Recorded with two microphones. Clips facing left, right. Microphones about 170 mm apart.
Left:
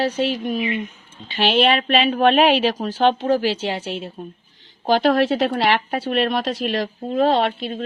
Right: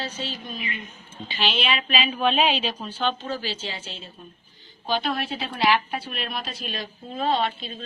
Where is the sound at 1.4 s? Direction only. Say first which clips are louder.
Left 9 dB; 60° left (ahead or behind).